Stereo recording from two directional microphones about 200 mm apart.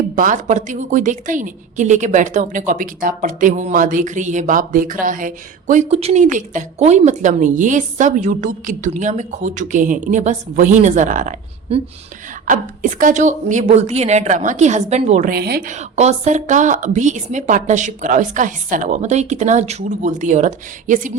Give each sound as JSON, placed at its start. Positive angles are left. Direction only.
{"t": 0.2, "sound": "a woman's voice", "side_deg": -40}
{"t": 15.3, "sound": "a woman's voice", "side_deg": -50}
{"t": 15.7, "sound": "a woman's voice", "side_deg": -35}